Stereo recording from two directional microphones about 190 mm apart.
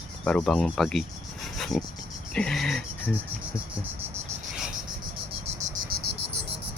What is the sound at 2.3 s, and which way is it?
Speech, 5° left (ahead or behind).